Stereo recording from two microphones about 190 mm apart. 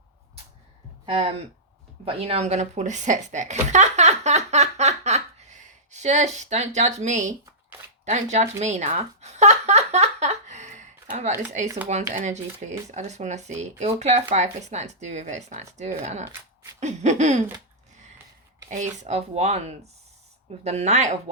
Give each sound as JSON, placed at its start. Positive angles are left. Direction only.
{"t": 2.0, "sound": "speech", "side_deg": -30}
{"t": 8.1, "sound": "a sound", "side_deg": -35}
{"t": 12.1, "sound": "speech", "side_deg": -40}
{"t": 18.7, "sound": "speech", "side_deg": -40}